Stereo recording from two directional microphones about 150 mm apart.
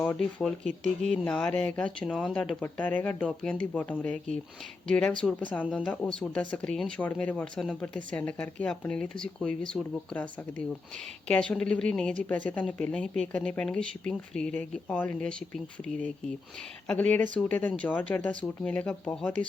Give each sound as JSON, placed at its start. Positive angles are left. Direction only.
{"t": 0.0, "sound": "speech", "side_deg": 10}
{"t": 11.3, "sound": "speech", "side_deg": 5}